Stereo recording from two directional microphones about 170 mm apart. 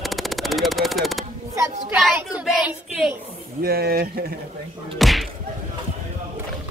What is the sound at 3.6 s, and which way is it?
Speech, 65° right (ahead or behind).